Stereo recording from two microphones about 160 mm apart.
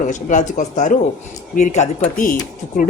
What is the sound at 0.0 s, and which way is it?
Speech, 55° left (ahead or behind).